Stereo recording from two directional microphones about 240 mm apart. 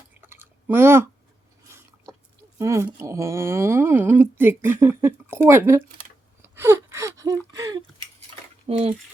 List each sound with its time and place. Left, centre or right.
0.1 s chewing: centre
2.6 s speech: centre
6.6 s gasp: centre
7.5 s speech: centre
8.6 s speech: right